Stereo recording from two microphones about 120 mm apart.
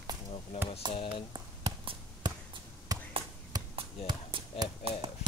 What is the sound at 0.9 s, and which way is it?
Speech, 45° left (ahead or behind).